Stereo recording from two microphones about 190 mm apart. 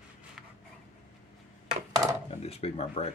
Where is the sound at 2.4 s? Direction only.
35° left (ahead or behind).